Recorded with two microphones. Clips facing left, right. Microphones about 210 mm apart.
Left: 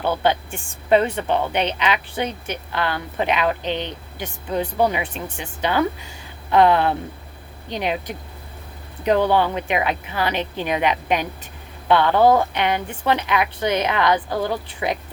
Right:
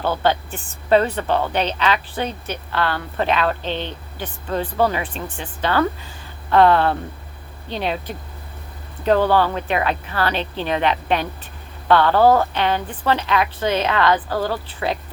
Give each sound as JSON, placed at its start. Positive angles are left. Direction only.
{"t": 0.0, "sound": "speech", "side_deg": 15}